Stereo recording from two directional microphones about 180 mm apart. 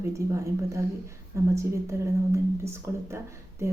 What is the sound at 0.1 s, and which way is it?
A woman's voice, 15° right (ahead or behind).